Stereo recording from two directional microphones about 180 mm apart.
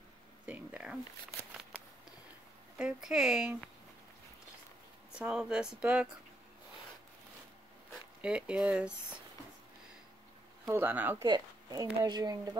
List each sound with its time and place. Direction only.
0.5 s speech: 10° right (ahead or behind)
1.6 s a sound: 5° right (ahead or behind)
2.8 s speech: 5° right (ahead or behind)
5.1 s speech: 5° right (ahead or behind)
8.2 s speech: 5° right (ahead or behind)
10.7 s speech: 10° right (ahead or behind)
11.2 s speech: 25° right (ahead or behind)